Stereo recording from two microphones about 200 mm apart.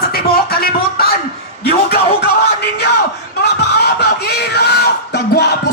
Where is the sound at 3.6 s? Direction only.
55° left (ahead or behind).